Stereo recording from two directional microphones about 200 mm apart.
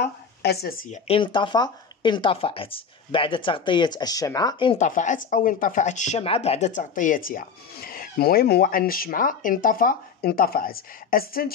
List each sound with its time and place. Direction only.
0.0 s a sound: 55° left (ahead or behind)
0.8 s speech: 30° left (ahead or behind)
4.7 s speech: 40° left (ahead or behind)